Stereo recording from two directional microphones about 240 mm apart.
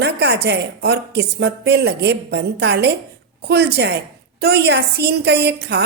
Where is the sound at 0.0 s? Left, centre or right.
Right.